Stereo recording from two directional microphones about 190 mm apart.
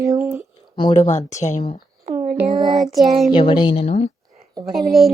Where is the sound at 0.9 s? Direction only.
40° left (ahead or behind).